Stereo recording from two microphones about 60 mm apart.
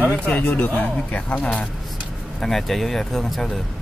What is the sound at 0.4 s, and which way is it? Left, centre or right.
Speech, left.